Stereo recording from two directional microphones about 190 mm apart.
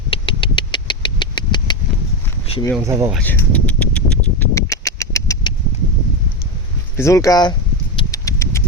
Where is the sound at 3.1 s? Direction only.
10° left (ahead or behind).